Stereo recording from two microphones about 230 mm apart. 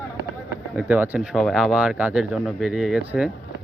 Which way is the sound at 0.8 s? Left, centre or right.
Centre.